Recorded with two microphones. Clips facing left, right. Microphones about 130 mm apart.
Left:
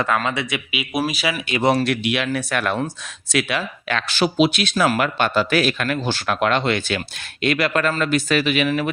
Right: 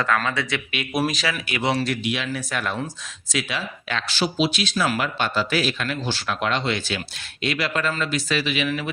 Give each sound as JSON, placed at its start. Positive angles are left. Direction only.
{"t": 0.0, "sound": "speech", "side_deg": 20}
{"t": 0.7, "sound": "speech", "side_deg": 5}
{"t": 1.8, "sound": "a man's voice", "side_deg": 65}